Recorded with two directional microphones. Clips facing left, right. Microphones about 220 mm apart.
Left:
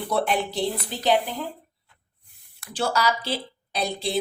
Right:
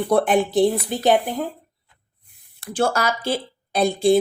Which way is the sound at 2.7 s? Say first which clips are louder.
Right 3 dB; 50° right (ahead or behind).